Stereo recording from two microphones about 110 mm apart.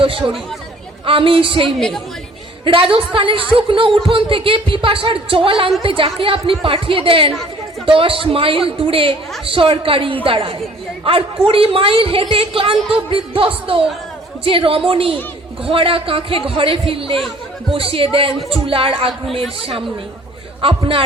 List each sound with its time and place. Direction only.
0.0 s speech: 55° right (ahead or behind)
2.7 s speech: 55° right (ahead or behind)
19.2 s speech: centre (ahead or behind)
19.5 s speech: 55° right (ahead or behind)